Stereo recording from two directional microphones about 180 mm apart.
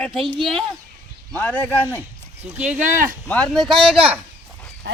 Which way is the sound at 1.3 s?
10° left (ahead or behind).